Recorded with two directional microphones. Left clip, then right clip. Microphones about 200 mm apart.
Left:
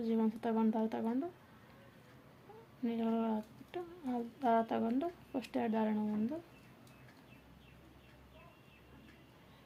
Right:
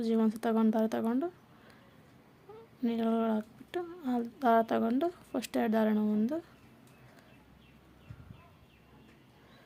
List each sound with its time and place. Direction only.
0.0 s speech: 35° right (ahead or behind)
2.8 s speech: 35° right (ahead or behind)